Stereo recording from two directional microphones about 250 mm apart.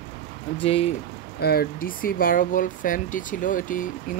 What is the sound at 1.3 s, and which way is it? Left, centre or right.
Speech, left.